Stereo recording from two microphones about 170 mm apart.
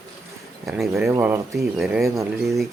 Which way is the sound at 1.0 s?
15° right (ahead or behind).